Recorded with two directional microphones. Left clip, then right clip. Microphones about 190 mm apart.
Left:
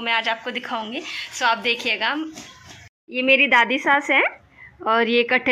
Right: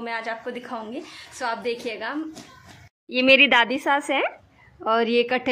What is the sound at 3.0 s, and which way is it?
A woman's voice, 15° right (ahead or behind).